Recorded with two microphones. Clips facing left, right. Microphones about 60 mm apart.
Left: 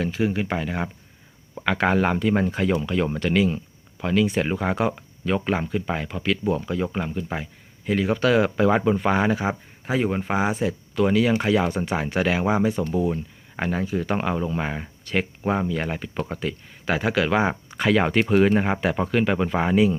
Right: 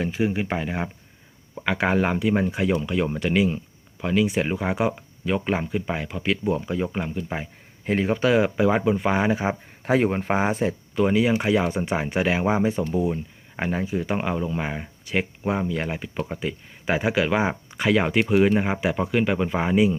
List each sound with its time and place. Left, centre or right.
0.0 s speech: centre
6.2 s speech: centre
6.9 s speech: centre
7.9 s speech: right
8.4 s speech: centre; by 9.6 s right
9.8 s speech: right
10.1 s speech: right
10.9 s speech: right